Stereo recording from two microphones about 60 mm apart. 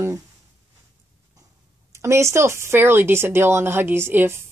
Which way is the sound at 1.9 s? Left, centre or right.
Right.